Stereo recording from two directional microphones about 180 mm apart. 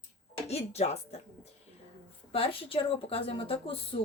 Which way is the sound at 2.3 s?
30° left (ahead or behind).